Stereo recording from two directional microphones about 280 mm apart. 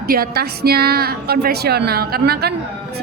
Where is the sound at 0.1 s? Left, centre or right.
Right.